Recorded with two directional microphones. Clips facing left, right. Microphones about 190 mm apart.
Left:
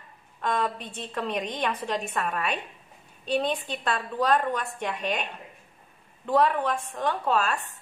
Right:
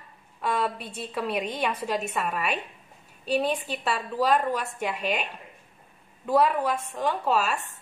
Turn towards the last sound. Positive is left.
turn(degrees=-5)  # may be behind; listen again after turning